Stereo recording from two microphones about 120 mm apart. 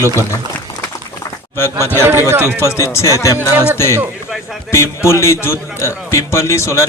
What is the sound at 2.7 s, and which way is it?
Speech, 20° left (ahead or behind).